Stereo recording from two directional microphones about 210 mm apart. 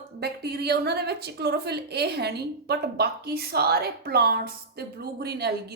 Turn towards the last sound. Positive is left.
turn(degrees=-50)  # may be behind; listen again after turning